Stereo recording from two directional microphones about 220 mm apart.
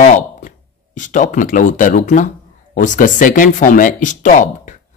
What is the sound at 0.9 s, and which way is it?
Speech, 35° left (ahead or behind).